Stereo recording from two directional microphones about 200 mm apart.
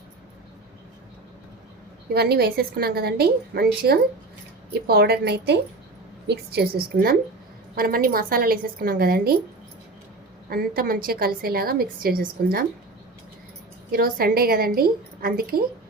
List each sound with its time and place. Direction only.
2.1 s a woman's voice: 50° right (ahead or behind)
10.5 s a woman's voice: 50° right (ahead or behind)
13.9 s a woman's voice: 50° right (ahead or behind)